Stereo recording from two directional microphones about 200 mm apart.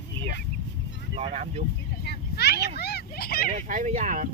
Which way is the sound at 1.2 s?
30° right (ahead or behind).